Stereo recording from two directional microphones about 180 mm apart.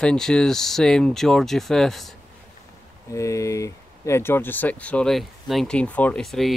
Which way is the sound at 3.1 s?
15° left (ahead or behind).